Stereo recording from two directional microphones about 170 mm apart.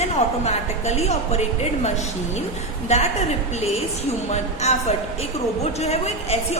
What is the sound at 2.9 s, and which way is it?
Speech, 40° left (ahead or behind).